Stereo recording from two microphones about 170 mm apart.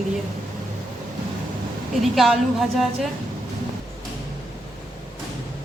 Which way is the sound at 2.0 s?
Centre (ahead or behind).